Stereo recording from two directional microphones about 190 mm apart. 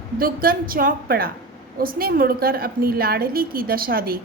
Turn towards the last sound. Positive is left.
turn(degrees=-50)  # may be behind; listen again after turning